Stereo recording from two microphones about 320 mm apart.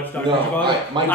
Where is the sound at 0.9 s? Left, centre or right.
Centre.